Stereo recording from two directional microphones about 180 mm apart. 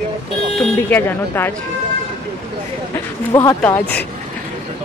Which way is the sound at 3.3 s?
15° left (ahead or behind).